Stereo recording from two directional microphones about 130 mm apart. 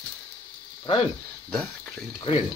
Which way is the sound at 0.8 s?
45° left (ahead or behind).